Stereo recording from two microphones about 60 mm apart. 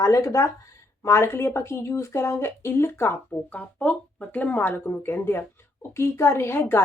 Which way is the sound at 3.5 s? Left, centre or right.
Left.